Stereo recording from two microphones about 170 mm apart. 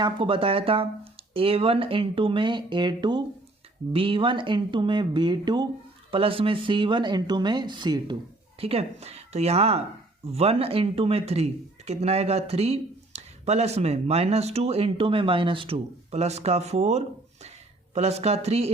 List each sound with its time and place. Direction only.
0.0 s speech: 30° right (ahead or behind)
8.5 s speech: 35° right (ahead or behind)